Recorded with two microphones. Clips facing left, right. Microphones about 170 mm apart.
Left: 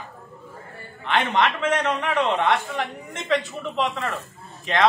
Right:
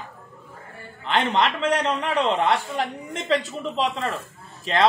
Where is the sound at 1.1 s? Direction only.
35° right (ahead or behind).